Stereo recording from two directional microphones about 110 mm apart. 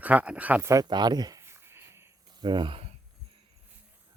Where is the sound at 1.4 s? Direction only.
25° right (ahead or behind).